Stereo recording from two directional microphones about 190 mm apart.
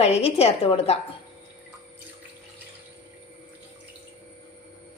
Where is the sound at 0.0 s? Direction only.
30° left (ahead or behind).